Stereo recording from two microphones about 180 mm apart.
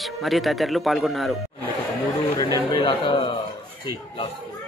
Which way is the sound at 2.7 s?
25° left (ahead or behind).